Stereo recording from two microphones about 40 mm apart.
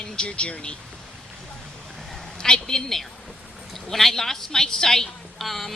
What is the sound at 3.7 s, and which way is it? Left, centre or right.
A woman's voice, centre.